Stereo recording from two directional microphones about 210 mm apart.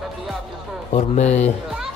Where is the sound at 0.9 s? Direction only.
30° left (ahead or behind).